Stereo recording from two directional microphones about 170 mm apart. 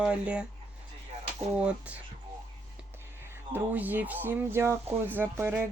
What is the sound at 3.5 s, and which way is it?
Speech, 10° right (ahead or behind).